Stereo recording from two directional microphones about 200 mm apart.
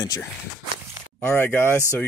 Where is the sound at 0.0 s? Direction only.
15° left (ahead or behind).